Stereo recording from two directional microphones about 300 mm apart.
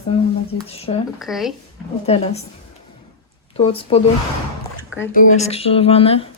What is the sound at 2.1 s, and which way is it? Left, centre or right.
Speech, left.